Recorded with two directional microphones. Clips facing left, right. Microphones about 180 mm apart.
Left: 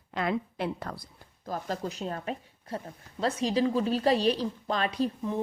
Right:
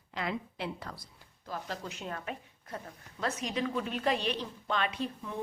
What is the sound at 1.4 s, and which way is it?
A woman's voice, 45° left (ahead or behind).